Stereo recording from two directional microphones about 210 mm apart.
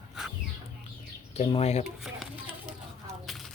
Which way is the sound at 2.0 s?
Centre (ahead or behind).